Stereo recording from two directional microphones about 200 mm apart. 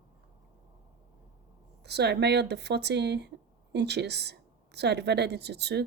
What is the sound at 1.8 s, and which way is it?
A woman's voice, 55° right (ahead or behind).